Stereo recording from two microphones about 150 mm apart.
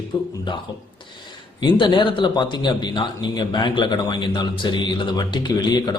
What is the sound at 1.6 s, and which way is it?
A man's voice, 35° left (ahead or behind).